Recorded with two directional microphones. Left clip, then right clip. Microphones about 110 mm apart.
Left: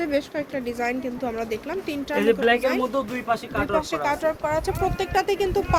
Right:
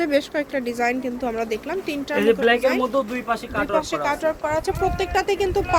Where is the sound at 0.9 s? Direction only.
40° right (ahead or behind).